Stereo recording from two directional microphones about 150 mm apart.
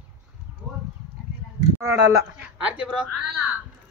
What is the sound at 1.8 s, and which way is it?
Speech, 25° right (ahead or behind).